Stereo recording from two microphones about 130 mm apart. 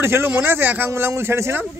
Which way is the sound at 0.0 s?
20° right (ahead or behind).